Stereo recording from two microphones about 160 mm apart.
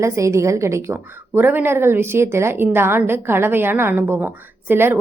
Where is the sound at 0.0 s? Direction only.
20° right (ahead or behind).